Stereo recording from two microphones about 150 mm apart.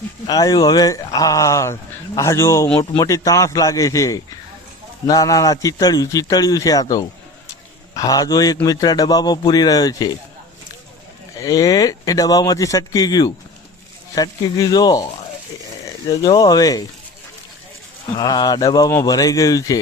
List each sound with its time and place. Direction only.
0.3 s speech: 25° left (ahead or behind)
7.9 s speech: 25° left (ahead or behind)
11.3 s speech: 25° left (ahead or behind)
16.0 s speech: 25° left (ahead or behind)
18.1 s speech: 25° left (ahead or behind)